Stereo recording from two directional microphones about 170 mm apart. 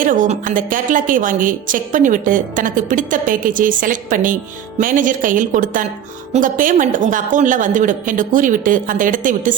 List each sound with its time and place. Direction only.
0.0 s a woman's voice: 50° right (ahead or behind)